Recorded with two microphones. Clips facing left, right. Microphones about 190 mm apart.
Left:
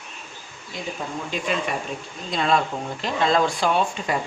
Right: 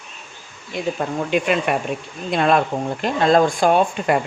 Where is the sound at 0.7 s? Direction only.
65° right (ahead or behind).